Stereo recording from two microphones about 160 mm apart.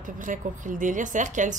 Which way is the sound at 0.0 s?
55° right (ahead or behind).